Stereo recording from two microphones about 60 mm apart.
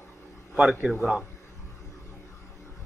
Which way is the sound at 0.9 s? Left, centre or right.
Centre.